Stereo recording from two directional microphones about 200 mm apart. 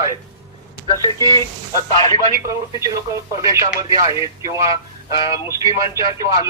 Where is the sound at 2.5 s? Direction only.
15° right (ahead or behind).